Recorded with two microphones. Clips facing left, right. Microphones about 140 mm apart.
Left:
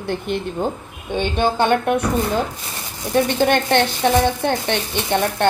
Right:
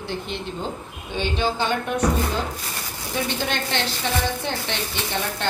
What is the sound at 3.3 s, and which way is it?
A woman's voice, 55° left (ahead or behind).